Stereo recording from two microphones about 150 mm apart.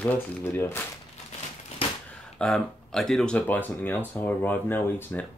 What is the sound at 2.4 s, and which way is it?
Speech, 5° left (ahead or behind).